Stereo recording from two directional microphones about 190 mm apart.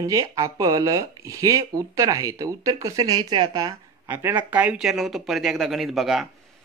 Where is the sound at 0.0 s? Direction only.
15° right (ahead or behind).